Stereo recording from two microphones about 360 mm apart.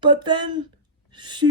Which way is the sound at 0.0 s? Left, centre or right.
Centre.